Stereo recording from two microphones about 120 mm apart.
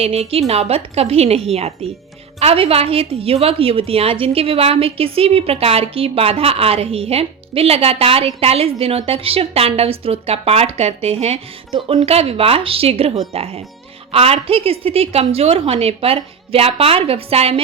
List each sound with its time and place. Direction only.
0.0 s a woman's voice: 55° right (ahead or behind)